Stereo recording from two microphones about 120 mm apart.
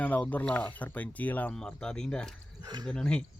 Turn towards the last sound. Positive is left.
turn(degrees=5)  # may be behind; listen again after turning